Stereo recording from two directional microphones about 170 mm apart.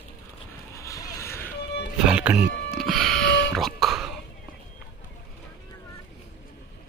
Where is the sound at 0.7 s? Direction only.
20° left (ahead or behind).